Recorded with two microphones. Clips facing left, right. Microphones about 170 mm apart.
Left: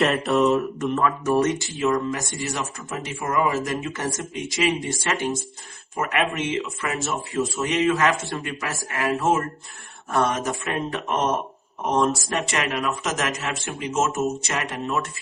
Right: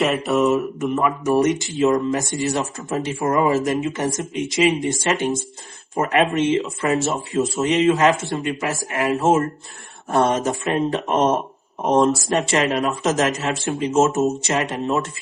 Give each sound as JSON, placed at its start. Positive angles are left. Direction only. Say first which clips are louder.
{"t": 0.0, "sound": "mantra", "louder": "right 1 dB", "side_deg": 0}
{"t": 1.2, "sound": "speech", "louder": "right 3 dB", "side_deg": -15}